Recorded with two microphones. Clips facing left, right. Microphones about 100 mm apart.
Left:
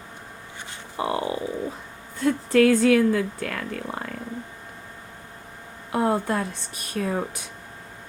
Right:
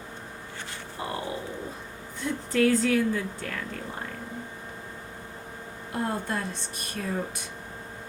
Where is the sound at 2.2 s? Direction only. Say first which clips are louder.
Left 6 dB; 75° left (ahead or behind).